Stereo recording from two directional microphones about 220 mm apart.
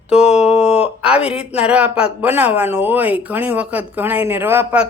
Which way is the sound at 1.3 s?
5° right (ahead or behind).